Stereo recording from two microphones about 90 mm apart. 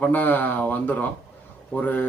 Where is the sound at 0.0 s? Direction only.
20° left (ahead or behind).